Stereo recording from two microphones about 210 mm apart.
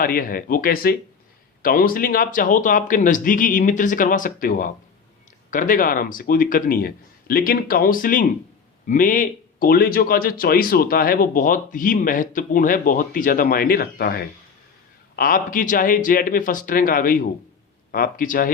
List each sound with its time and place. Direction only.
0.0 s speech: 45° left (ahead or behind)